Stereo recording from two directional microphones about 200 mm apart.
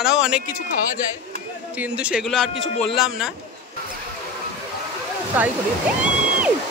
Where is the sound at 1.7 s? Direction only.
5° right (ahead or behind).